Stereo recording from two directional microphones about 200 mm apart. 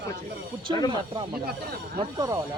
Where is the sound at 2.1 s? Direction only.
20° right (ahead or behind).